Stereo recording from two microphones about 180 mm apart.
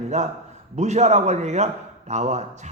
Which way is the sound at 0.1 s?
40° right (ahead or behind).